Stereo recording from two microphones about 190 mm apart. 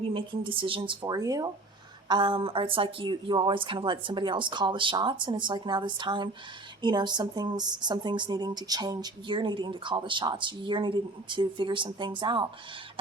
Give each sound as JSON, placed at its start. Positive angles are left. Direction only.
{"t": 0.1, "sound": "a woman's voice", "side_deg": -25}